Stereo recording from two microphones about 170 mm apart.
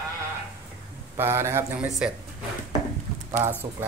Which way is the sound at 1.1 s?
15° right (ahead or behind).